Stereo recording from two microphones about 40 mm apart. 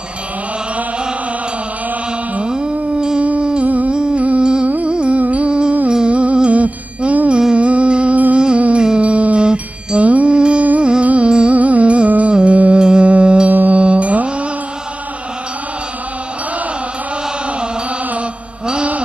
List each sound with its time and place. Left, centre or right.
2.3 s music: right
3.9 s humming: right
4.4 s music: right
4.6 s music: right
4.9 s music: right
7.5 s humming: right
9.0 s music: right
11.5 s music: right
12.7 s music: right
13.5 s music: right
13.7 s music: right